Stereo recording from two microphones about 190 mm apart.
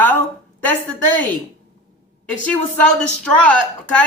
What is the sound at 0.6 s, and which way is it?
Speech, 10° left (ahead or behind).